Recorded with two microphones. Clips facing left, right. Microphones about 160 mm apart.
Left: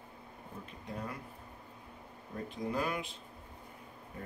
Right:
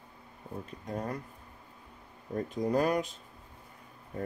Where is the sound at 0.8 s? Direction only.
40° right (ahead or behind).